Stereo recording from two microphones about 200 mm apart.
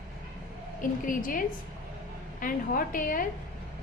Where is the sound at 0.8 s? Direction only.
40° left (ahead or behind).